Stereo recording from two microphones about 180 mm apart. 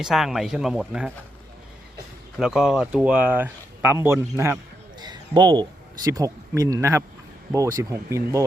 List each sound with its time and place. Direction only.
0.0 s speech: centre (ahead or behind)
2.4 s speech: 5° right (ahead or behind)